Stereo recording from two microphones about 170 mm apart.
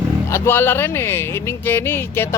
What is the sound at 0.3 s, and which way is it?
Speech, 15° left (ahead or behind).